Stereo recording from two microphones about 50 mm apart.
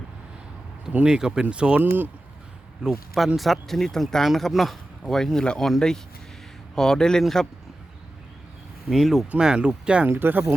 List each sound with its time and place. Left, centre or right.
1.0 s speech: centre
2.8 s speech: centre
3.3 s a man's voice: centre
8.9 s speech: centre
9.4 s speech: centre
10.1 s speech: right